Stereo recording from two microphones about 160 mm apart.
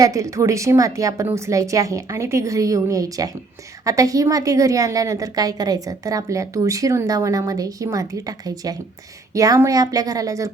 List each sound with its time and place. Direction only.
0.0 s a woman's voice: 20° right (ahead or behind)